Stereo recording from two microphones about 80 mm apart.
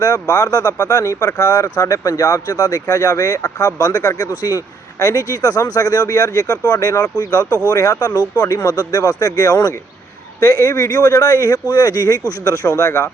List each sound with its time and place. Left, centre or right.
0.0 s speech: left